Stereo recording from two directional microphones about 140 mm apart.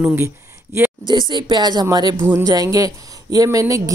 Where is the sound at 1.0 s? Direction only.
30° right (ahead or behind).